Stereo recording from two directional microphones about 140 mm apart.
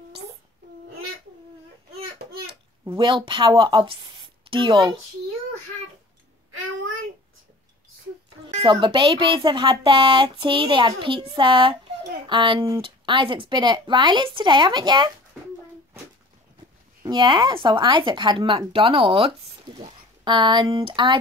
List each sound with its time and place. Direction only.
2.9 s a woman's voice: 35° right (ahead or behind)
8.6 s speech: 35° right (ahead or behind)
17.0 s speech: 30° right (ahead or behind)